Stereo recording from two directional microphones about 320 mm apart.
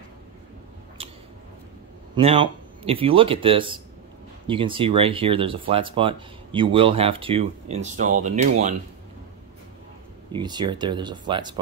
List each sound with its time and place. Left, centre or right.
2.1 s speech: centre
10.3 s speech: centre